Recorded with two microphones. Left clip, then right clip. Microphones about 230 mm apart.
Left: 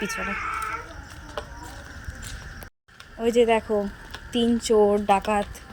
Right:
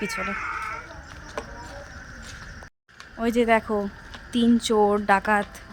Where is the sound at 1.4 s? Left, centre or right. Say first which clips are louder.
Even; left.